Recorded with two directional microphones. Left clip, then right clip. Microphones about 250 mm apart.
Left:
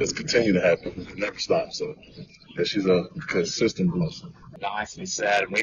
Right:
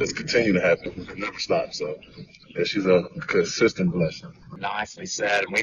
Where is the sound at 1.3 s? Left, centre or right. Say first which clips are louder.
Right 1 dB; centre.